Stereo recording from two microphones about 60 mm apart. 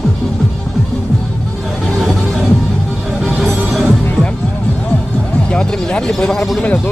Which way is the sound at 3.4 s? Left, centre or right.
Centre.